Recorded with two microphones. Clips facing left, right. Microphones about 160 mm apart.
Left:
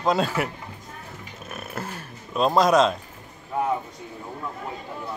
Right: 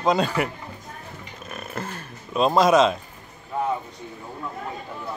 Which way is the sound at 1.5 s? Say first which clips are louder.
Right 1 dB; 5° left (ahead or behind).